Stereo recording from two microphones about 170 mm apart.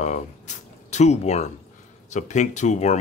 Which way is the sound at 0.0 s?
45° left (ahead or behind).